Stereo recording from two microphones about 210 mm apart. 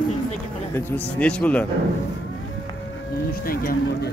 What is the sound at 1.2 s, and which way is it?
Speech, 5° left (ahead or behind).